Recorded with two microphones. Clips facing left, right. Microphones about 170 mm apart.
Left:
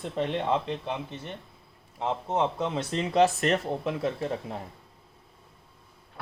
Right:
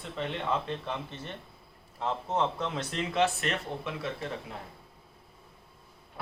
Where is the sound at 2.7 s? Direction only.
30° left (ahead or behind).